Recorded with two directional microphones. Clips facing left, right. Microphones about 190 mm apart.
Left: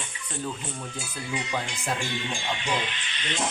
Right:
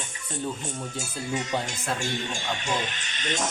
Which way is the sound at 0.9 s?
45° right (ahead or behind).